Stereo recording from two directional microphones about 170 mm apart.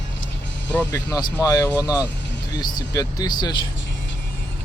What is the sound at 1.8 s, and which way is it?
Speech, 10° right (ahead or behind).